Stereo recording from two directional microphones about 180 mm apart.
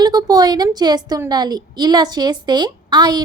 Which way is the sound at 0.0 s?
20° right (ahead or behind).